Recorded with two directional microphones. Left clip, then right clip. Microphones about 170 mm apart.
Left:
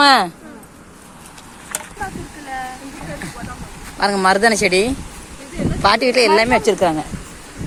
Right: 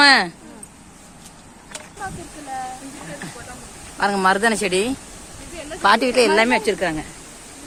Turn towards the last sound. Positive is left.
turn(degrees=15)  # may be behind; listen again after turning